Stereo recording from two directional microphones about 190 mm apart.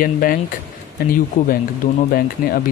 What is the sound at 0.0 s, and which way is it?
Speech, 50° left (ahead or behind).